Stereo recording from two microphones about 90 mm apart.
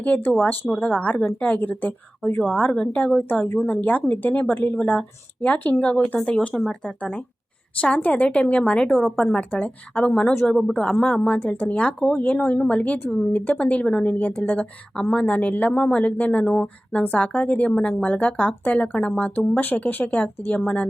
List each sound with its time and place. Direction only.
0.0 s speech: 15° left (ahead or behind)